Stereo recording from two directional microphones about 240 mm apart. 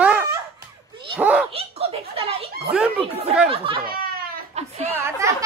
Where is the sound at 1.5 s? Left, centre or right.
Right.